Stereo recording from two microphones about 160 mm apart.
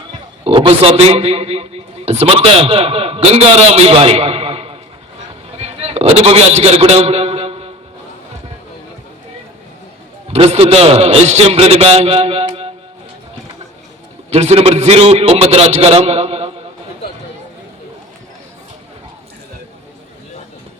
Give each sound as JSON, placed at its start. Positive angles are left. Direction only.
{"t": 0.4, "sound": "a man's voice", "side_deg": -35}
{"t": 5.5, "sound": "a sound", "side_deg": -40}
{"t": 10.3, "sound": "a man's voice", "side_deg": -40}
{"t": 14.3, "sound": "a man's voice", "side_deg": -40}